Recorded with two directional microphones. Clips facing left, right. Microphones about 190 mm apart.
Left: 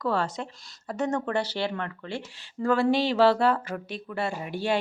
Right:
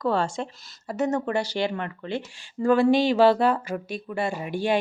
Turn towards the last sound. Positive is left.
turn(degrees=-15)  # may be behind; listen again after turning